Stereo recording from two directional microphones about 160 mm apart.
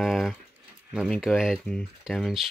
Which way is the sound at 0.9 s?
Centre (ahead or behind).